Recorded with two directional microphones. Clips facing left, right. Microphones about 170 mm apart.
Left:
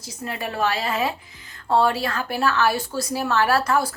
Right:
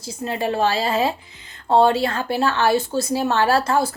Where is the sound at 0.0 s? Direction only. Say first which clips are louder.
Right 6 dB; 30° right (ahead or behind).